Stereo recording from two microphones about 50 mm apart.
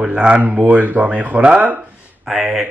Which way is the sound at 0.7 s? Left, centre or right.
Right.